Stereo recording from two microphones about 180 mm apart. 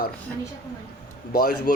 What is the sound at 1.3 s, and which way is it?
Speech, 60° left (ahead or behind).